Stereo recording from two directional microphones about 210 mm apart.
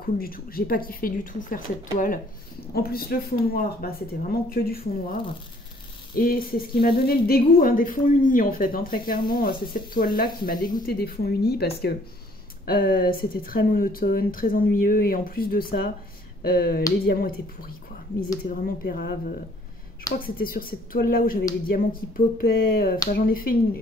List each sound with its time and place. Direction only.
0.0 s speech: 45° left (ahead or behind)
6.1 s speech: 45° left (ahead or behind)
20.2 s speech: 45° left (ahead or behind)